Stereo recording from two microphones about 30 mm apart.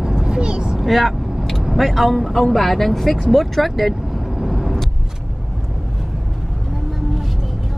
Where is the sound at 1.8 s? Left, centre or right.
Centre.